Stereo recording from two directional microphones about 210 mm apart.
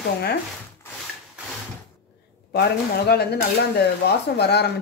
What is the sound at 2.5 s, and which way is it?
Speech, 50° left (ahead or behind).